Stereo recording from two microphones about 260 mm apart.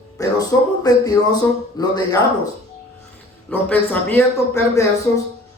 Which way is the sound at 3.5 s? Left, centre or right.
Centre.